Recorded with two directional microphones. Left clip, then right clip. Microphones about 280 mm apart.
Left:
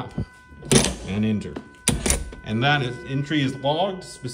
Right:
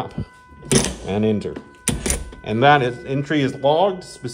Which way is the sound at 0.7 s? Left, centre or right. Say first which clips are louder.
Even; centre.